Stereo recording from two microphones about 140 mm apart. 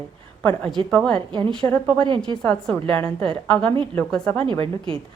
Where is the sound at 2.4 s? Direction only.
5° left (ahead or behind).